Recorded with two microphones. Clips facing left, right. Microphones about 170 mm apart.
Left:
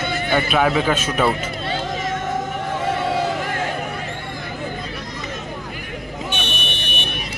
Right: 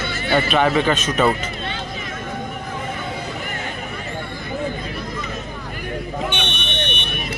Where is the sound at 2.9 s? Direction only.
90° left.